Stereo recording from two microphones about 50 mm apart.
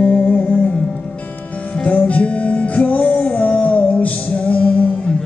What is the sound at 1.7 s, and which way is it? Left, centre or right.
Music, left.